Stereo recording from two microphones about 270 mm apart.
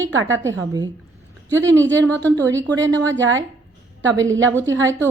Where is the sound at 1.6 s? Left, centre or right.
Centre.